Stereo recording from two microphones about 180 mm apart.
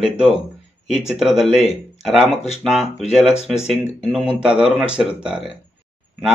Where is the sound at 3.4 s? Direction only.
35° left (ahead or behind).